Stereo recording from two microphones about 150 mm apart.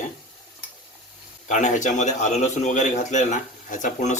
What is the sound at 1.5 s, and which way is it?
A man's voice, 55° left (ahead or behind).